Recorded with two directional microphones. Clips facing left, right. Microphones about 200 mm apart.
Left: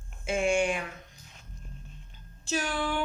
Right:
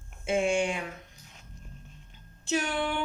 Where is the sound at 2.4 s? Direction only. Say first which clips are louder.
Right 1 dB; 20° right (ahead or behind).